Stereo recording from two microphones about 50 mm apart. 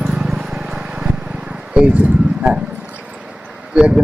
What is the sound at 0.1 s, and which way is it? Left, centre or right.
Vehicle, centre.